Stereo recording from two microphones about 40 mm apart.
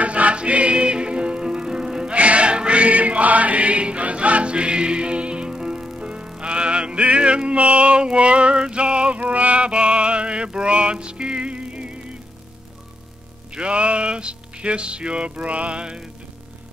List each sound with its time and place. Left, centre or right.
0.0 s music: right; by 2.1 s centre
2.1 s choir: right
13.5 s music: right